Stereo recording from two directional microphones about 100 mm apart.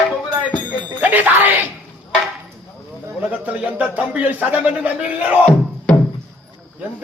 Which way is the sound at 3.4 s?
15° right (ahead or behind).